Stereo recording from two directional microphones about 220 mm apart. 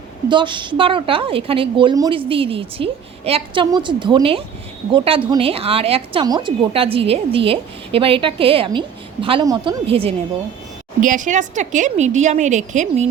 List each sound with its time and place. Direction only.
0.3 s a woman's voice: 20° right (ahead or behind)
11.0 s a woman's voice: 35° right (ahead or behind)